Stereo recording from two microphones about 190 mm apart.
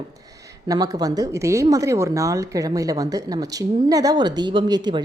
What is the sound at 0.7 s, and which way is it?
Speech, 20° right (ahead or behind).